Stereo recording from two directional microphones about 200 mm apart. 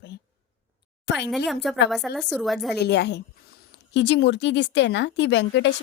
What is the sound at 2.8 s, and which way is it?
Speech, 55° left (ahead or behind).